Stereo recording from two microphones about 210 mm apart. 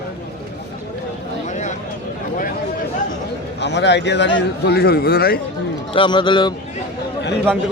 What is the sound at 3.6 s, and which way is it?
A man's voice, 55° left (ahead or behind).